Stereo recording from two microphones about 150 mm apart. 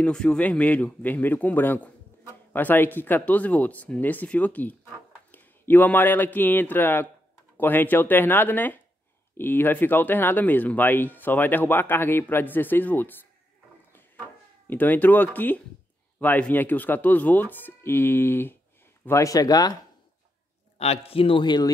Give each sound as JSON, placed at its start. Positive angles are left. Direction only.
{"t": 0.0, "sound": "speech", "side_deg": 5}
{"t": 14.7, "sound": "speech", "side_deg": 10}
{"t": 20.7, "sound": "a man's voice", "side_deg": 45}